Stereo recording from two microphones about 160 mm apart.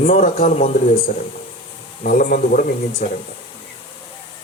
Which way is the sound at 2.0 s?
60° left (ahead or behind).